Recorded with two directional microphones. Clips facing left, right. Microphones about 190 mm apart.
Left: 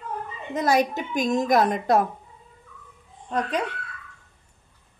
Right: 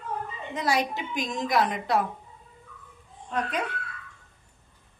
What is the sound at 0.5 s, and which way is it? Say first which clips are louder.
A woman's voice: left 5 dB; 45° left (ahead or behind).